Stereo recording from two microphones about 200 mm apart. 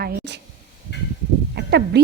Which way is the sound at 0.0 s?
50° right (ahead or behind).